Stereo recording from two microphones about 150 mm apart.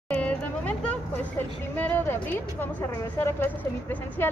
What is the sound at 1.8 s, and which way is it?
A woman's voice, 15° left (ahead or behind).